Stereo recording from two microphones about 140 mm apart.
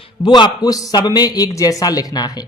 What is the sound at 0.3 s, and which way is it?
A man's voice, 30° left (ahead or behind).